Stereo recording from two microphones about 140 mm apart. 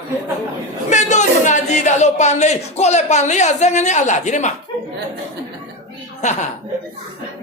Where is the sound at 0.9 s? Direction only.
60° left (ahead or behind).